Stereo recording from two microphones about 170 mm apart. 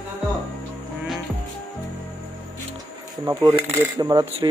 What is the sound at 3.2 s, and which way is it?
Speech, 20° right (ahead or behind).